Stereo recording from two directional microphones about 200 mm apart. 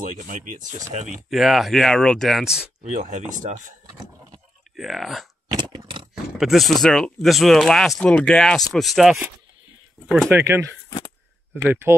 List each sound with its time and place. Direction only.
0.0 s speech: 40° right (ahead or behind)
1.3 s speech: centre (ahead or behind)
2.8 s speech: 35° right (ahead or behind)
4.7 s speech: centre (ahead or behind)
5.5 s a sound: 20° right (ahead or behind)
6.3 s speech: centre (ahead or behind)
10.3 s speech: 15° right (ahead or behind)